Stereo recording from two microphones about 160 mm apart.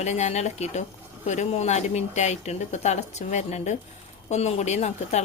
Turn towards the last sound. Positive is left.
turn(degrees=45)  # may be behind; listen again after turning